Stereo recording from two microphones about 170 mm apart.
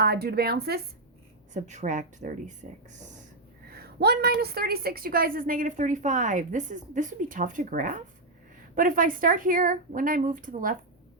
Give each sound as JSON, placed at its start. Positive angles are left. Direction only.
{"t": 0.0, "sound": "speech", "side_deg": -65}
{"t": 1.5, "sound": "a woman's voice", "side_deg": -45}
{"t": 3.7, "sound": "a woman's voice", "side_deg": -65}